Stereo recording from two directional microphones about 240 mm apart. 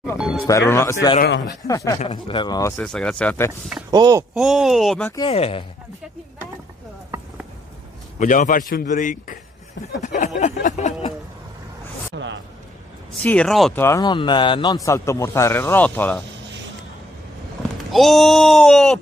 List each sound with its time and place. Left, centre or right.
0.2 s music: centre
0.5 s a man's voice: centre
2.8 s speech: centre
3.9 s speech: centre
4.3 s speech: centre
5.1 s speech: left
8.2 s a man's voice: left
10.0 s a sound: left
13.2 s a man's voice: centre
17.9 s speech: centre